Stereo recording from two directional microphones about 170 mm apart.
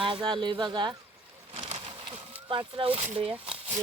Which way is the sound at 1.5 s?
35° right (ahead or behind).